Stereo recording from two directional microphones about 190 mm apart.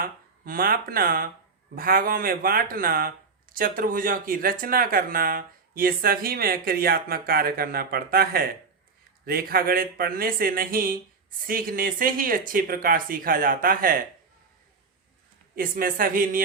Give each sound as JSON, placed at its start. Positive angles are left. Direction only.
{"t": 0.0, "sound": "speech", "side_deg": -50}
{"t": 15.5, "sound": "speech", "side_deg": -50}